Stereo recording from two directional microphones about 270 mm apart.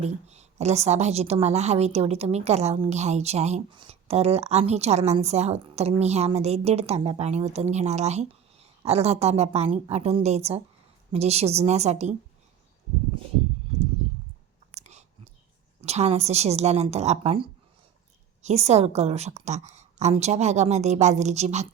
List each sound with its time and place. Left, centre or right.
0.0 s a woman's voice: right
14.8 s clicking: right
15.8 s a woman's voice: right